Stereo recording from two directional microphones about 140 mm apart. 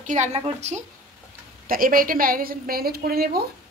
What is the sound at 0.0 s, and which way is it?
Speech, 60° right (ahead or behind).